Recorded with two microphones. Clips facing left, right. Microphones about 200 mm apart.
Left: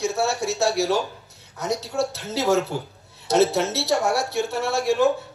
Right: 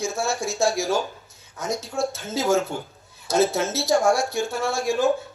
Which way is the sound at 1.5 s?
70° left (ahead or behind).